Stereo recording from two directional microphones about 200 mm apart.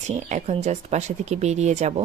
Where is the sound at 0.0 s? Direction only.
35° right (ahead or behind).